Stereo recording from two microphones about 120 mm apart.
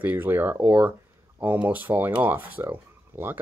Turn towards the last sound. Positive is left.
turn(degrees=-15)  # may be behind; listen again after turning